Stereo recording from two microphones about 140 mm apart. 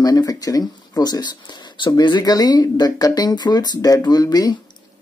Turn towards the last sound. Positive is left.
turn(degrees=25)  # may be behind; listen again after turning